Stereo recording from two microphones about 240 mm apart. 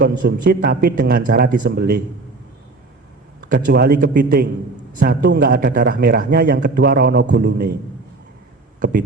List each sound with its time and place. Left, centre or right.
0.0 s a man's voice: right
3.5 s a man's voice: right